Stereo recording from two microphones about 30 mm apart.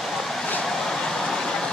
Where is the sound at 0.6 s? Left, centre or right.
Centre.